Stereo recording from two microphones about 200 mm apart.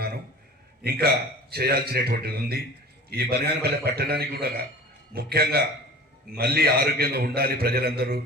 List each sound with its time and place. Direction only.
0.9 s a man's voice: 50° right (ahead or behind)